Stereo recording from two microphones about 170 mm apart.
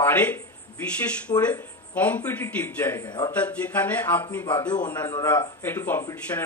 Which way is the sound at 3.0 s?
25° left (ahead or behind).